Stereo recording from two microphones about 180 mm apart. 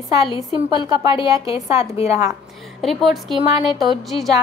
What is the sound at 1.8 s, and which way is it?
Speech, 35° left (ahead or behind).